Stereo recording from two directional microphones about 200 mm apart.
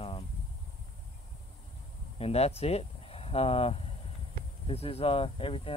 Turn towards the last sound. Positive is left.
turn(degrees=25)  # may be behind; listen again after turning